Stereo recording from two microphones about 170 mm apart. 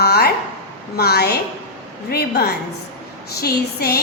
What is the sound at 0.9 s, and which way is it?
A woman's voice, 70° left (ahead or behind).